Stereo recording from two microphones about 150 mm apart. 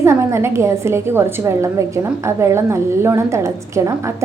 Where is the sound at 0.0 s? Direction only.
15° right (ahead or behind).